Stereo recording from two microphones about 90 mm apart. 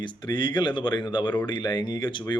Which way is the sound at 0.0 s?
55° left (ahead or behind).